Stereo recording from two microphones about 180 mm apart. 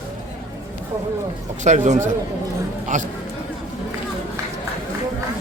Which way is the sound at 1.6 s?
40° right (ahead or behind).